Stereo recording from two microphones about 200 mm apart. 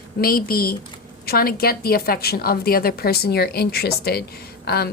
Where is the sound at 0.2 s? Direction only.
50° left (ahead or behind).